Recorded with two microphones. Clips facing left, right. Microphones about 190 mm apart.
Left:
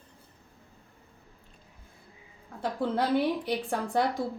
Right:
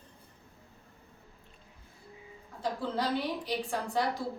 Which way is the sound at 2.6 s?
55° left (ahead or behind).